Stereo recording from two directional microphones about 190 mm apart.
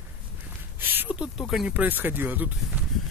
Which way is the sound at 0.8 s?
10° right (ahead or behind).